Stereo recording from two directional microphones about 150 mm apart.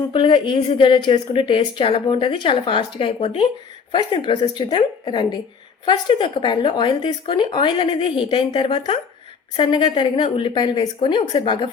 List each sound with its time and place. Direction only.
0.1 s a woman's voice: 35° left (ahead or behind)